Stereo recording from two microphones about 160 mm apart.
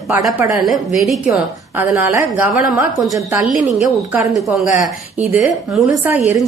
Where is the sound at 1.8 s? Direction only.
10° right (ahead or behind).